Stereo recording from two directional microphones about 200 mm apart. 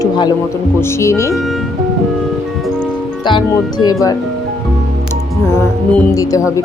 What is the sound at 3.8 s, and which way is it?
Speech, 20° left (ahead or behind).